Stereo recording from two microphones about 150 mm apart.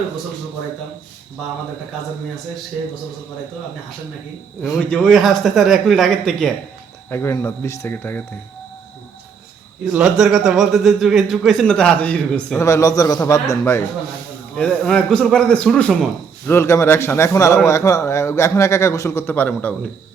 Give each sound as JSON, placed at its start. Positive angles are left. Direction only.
{"t": 4.9, "sound": "a man's voice", "side_deg": 0}
{"t": 7.1, "sound": "speech", "side_deg": 15}
{"t": 9.9, "sound": "a man's voice", "side_deg": -5}
{"t": 12.5, "sound": "a man's voice", "side_deg": 20}
{"t": 14.5, "sound": "a man's voice", "side_deg": 5}
{"t": 16.5, "sound": "a man's voice", "side_deg": 20}